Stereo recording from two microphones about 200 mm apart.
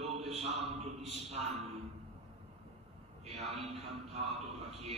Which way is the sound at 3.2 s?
30° right (ahead or behind).